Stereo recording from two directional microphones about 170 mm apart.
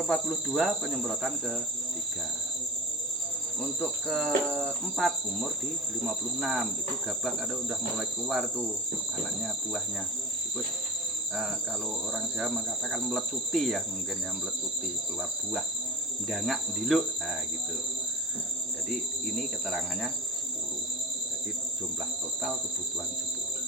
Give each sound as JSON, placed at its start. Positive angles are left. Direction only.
{"t": 0.1, "sound": "insect", "side_deg": 0}
{"t": 3.6, "sound": "insect", "side_deg": 0}
{"t": 12.1, "sound": "insect", "side_deg": 0}
{"t": 16.3, "sound": "insect", "side_deg": 0}
{"t": 19.4, "sound": "insect", "side_deg": 0}